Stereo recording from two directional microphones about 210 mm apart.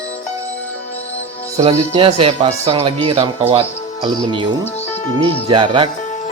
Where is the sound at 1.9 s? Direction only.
25° right (ahead or behind).